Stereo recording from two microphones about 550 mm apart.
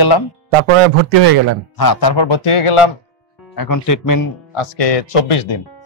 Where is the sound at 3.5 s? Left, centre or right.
Left.